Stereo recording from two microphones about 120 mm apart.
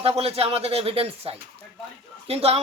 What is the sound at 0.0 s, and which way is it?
Speech, 55° right (ahead or behind).